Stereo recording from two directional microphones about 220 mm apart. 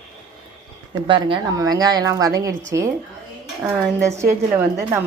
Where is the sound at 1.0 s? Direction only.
20° right (ahead or behind).